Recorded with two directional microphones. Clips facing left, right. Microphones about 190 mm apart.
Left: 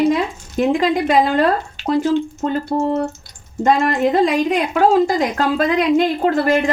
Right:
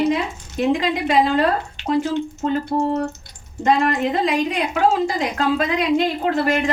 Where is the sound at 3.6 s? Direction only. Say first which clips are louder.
Left 3 dB; 45° left (ahead or behind).